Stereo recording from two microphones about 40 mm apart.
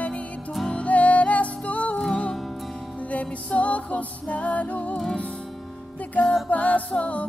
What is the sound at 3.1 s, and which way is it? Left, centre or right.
Music, left.